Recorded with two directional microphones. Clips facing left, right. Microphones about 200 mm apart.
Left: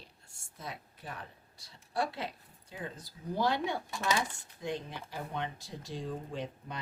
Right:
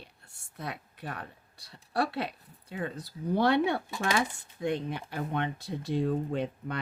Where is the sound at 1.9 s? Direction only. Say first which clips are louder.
Right 4 dB; 65° right (ahead or behind).